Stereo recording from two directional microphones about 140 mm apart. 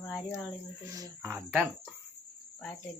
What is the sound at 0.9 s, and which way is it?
Speech, 20° right (ahead or behind).